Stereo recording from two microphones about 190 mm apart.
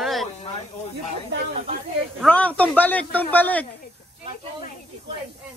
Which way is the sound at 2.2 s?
5° left (ahead or behind).